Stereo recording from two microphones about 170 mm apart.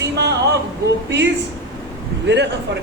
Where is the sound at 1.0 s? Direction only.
90° right.